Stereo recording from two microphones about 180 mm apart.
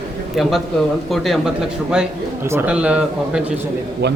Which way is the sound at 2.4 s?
10° right (ahead or behind).